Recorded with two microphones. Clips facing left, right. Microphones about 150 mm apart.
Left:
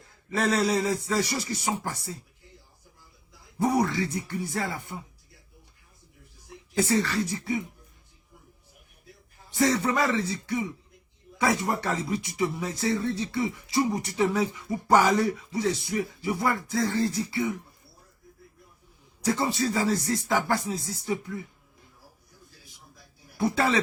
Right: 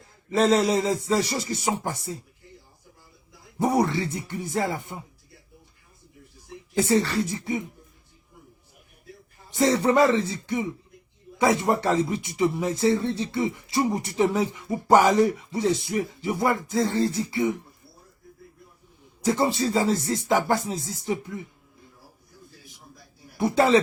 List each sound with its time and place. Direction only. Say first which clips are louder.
0.3 s speech: right 5 dB; 20° right (ahead or behind)
3.6 s speech: right 2 dB; 25° right (ahead or behind)
6.7 s speech: right 3 dB; 25° right (ahead or behind)
9.5 s speech: right 3 dB; 25° right (ahead or behind)
19.2 s speech: right 3 dB; 25° right (ahead or behind)
23.4 s speech: right 5 dB; 20° right (ahead or behind)